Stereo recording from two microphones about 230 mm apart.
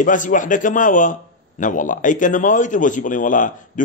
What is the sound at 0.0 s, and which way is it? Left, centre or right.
A man's voice, left.